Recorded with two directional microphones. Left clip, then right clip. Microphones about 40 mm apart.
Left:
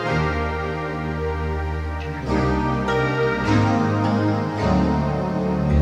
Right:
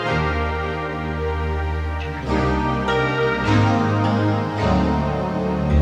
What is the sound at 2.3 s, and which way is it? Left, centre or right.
Music, left.